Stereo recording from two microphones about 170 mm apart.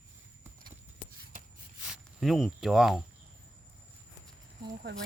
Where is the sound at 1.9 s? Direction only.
Centre (ahead or behind).